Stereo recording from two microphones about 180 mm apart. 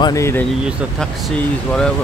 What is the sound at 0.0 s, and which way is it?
Speech, 15° left (ahead or behind).